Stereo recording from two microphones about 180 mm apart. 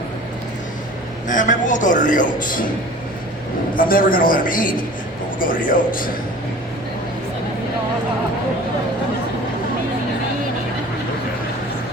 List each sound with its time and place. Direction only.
1.3 s a man's voice: 45° left (ahead or behind)
3.8 s a man's voice: 50° left (ahead or behind)